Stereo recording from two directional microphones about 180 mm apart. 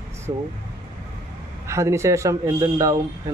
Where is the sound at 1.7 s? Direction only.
15° right (ahead or behind).